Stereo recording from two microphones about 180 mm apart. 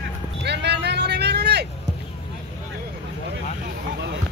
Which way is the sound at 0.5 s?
70° right (ahead or behind).